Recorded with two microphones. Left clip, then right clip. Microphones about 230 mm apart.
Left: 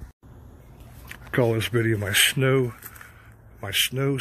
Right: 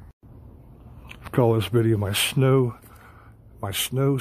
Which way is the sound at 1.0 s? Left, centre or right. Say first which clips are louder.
Right 1 dB; centre.